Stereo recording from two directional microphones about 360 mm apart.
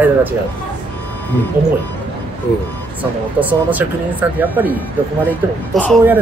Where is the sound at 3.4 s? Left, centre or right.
Centre.